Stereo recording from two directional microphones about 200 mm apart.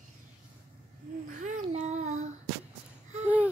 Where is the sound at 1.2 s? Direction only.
40° right (ahead or behind).